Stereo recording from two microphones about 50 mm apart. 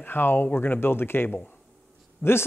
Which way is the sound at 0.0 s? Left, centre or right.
Left.